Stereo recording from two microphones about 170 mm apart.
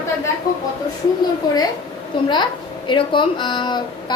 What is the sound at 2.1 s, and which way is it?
A child's voice, 30° left (ahead or behind).